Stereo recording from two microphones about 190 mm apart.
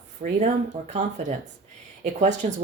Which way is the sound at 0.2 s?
40° right (ahead or behind).